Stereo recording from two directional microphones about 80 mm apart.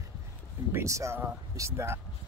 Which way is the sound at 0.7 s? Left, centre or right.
Right.